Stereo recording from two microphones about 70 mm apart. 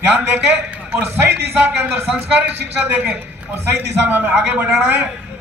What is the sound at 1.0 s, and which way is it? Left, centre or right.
A man's voice, right.